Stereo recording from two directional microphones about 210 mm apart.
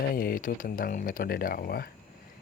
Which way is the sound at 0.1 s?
45° left (ahead or behind).